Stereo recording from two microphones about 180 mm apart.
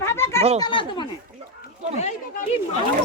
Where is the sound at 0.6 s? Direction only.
25° left (ahead or behind).